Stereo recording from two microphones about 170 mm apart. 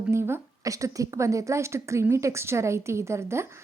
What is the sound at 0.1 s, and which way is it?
A woman's voice, 15° right (ahead or behind).